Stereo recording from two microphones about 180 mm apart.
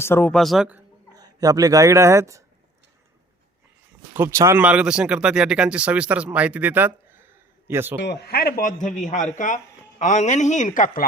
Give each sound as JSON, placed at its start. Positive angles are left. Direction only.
{"t": 0.0, "sound": "speech", "side_deg": 10}
{"t": 1.1, "sound": "speech", "side_deg": -20}
{"t": 4.1, "sound": "speech", "side_deg": -15}
{"t": 7.9, "sound": "a man's voice", "side_deg": 65}